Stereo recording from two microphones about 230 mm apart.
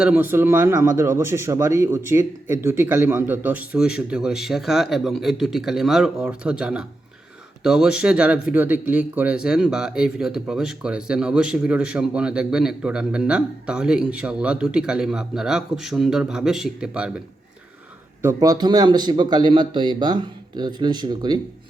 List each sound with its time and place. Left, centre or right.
0.0 s speech: centre
18.2 s a man's voice: centre